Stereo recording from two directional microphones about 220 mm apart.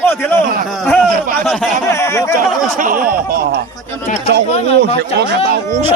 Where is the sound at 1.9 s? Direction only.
10° left (ahead or behind).